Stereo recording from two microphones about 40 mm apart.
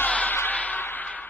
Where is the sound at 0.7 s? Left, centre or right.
Left.